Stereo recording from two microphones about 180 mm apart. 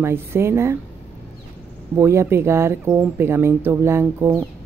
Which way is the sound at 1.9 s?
15° right (ahead or behind).